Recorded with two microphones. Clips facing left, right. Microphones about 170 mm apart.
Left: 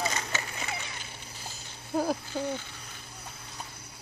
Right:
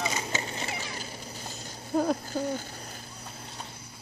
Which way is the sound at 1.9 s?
5° left (ahead or behind).